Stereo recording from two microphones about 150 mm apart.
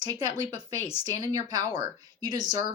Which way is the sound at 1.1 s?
25° right (ahead or behind).